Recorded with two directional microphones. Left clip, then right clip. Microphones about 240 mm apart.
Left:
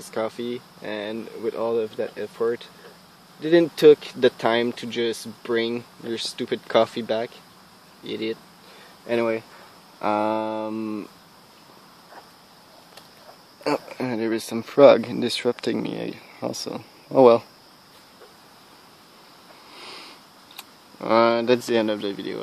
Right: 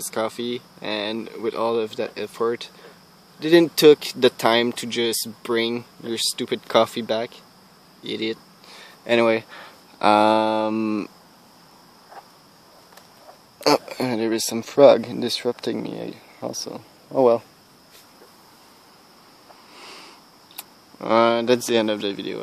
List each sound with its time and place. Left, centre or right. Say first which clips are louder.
0.1 s speech: right 2 dB; centre
9.0 s speech: right 5 dB; right
13.7 s speech: right 6 dB; centre
19.7 s sniff: left 2 dB; centre
20.5 s camera: right 1 dB; centre